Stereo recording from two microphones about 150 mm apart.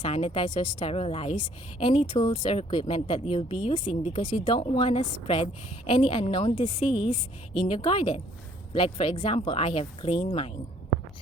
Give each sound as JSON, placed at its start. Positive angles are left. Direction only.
{"t": 0.0, "sound": "speech", "side_deg": 40}
{"t": 4.2, "sound": "speech", "side_deg": 30}
{"t": 4.6, "sound": "speech", "side_deg": 45}